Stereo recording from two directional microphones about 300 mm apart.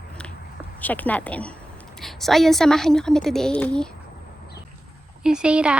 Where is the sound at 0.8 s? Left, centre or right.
Centre.